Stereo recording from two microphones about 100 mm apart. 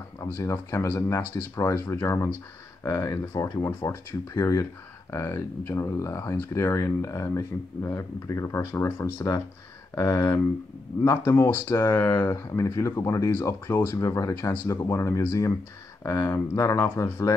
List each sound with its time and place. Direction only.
0.3 s speech: 30° left (ahead or behind)